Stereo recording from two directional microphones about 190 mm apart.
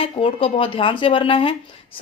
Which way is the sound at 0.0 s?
30° left (ahead or behind).